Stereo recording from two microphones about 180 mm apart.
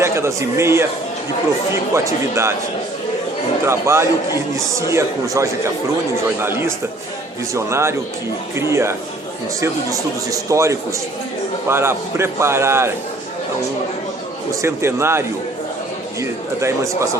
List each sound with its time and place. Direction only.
0.0 s a man's voice: 15° right (ahead or behind)
1.9 s a man's voice: 15° right (ahead or behind)
3.7 s a man's voice: 15° right (ahead or behind)
14.6 s a man's voice: 15° right (ahead or behind)
16.2 s a man's voice: 15° right (ahead or behind)